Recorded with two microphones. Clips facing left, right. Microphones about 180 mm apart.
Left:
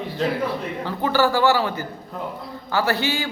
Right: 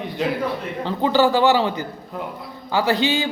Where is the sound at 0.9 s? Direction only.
20° right (ahead or behind).